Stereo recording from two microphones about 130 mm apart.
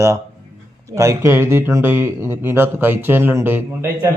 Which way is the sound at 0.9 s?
25° right (ahead or behind).